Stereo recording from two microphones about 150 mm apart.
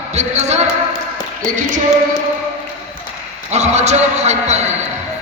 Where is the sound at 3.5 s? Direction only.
50° right (ahead or behind).